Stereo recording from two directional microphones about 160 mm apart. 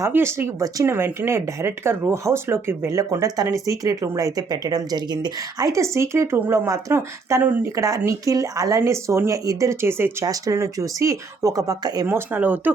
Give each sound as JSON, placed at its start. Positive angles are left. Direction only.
{"t": 0.0, "sound": "speech", "side_deg": -15}
{"t": 12.0, "sound": "speech", "side_deg": -10}